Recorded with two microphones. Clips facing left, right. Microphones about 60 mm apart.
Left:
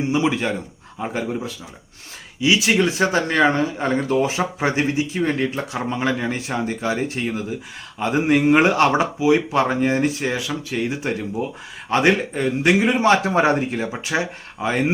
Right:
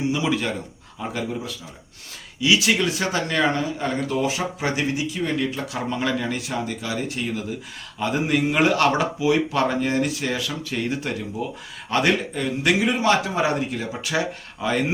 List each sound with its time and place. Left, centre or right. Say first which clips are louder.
0.1 s speech: left 3 dB; left
11.9 s speech: left 3 dB; left